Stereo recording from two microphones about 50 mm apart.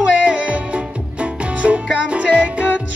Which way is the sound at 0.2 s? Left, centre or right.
Right.